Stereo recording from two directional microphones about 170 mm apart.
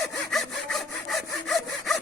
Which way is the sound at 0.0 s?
Centre (ahead or behind).